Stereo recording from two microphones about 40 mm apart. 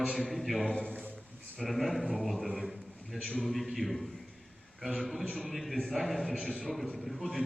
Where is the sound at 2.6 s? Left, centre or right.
Centre.